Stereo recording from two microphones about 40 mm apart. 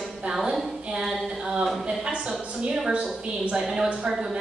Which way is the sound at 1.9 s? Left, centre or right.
Right.